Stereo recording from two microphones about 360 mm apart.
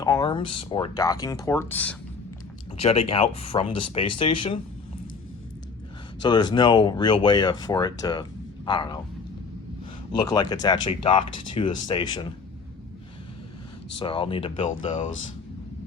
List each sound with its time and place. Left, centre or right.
0.0 s speech: centre
2.7 s speech: centre
6.2 s speech: centre
10.1 s speech: centre
14.0 s speech: centre